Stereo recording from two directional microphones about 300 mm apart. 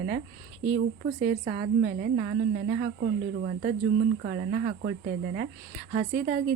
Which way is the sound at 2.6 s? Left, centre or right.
Right.